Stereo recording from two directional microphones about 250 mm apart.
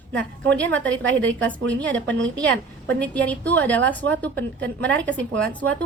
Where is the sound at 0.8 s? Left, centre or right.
Right.